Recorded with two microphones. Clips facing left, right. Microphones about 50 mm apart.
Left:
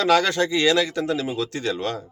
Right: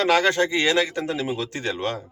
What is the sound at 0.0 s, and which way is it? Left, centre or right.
Speech, right.